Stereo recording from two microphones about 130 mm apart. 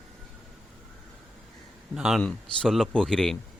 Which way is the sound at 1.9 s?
5° right (ahead or behind).